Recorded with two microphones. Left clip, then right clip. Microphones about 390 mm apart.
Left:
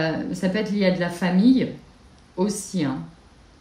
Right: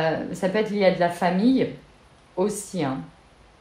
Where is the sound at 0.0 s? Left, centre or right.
Centre.